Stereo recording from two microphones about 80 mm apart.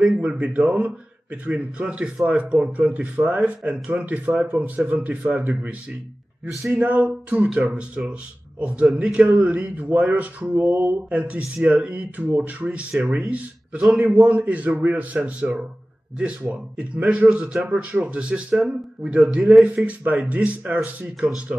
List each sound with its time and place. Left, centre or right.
0.0 s speech: centre
19.6 s speech: centre